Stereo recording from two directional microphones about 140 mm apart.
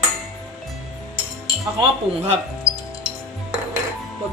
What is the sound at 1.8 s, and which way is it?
Speech, 45° right (ahead or behind).